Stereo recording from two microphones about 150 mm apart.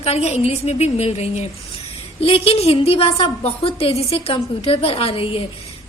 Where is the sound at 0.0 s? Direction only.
45° left (ahead or behind).